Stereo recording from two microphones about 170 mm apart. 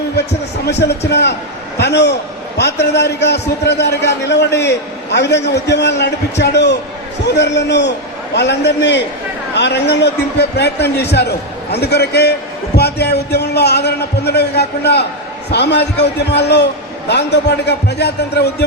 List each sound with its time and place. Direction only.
0.6 s a man's voice: 80° left